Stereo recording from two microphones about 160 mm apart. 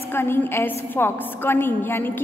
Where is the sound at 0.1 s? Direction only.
15° left (ahead or behind).